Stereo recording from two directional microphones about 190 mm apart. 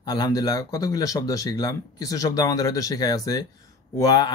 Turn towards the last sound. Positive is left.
turn(degrees=20)  # may be behind; listen again after turning